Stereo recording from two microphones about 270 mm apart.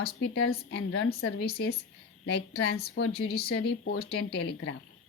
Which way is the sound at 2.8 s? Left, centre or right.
Left.